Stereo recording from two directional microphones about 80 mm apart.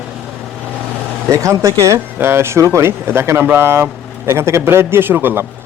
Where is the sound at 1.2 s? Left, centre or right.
Right.